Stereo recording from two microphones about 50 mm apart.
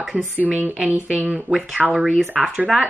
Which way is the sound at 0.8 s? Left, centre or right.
Right.